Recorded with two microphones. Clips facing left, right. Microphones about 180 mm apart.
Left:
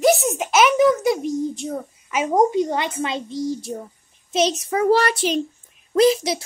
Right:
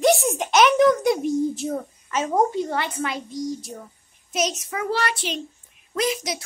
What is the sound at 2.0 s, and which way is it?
A child's voice, 15° left (ahead or behind).